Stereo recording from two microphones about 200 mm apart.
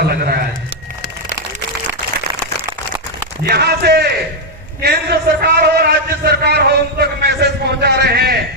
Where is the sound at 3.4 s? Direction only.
55° right (ahead or behind).